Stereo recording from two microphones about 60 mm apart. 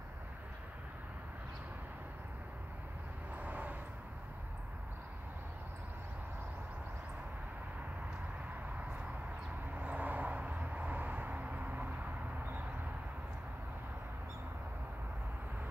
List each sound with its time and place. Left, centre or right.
3.3 s vehicle: right
9.8 s vehicle: right